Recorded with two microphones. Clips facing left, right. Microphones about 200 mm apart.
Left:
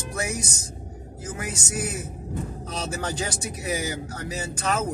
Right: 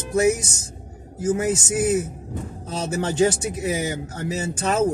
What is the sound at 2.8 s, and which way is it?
Speech, 25° right (ahead or behind).